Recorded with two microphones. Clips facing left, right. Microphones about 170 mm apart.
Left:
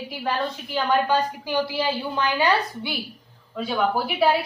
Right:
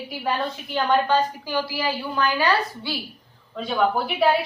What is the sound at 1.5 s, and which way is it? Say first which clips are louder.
A woman's voice: left 2 dB; 20° left (ahead or behind).